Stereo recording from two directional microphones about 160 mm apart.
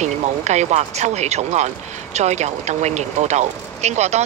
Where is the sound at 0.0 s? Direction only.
45° right (ahead or behind).